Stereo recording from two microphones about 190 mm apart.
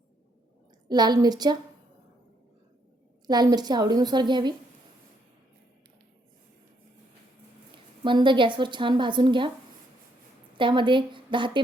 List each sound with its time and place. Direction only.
0.9 s a woman's voice: 20° right (ahead or behind)
3.2 s a woman's voice: 20° right (ahead or behind)
8.0 s a woman's voice: 25° right (ahead or behind)
10.6 s a woman's voice: 25° right (ahead or behind)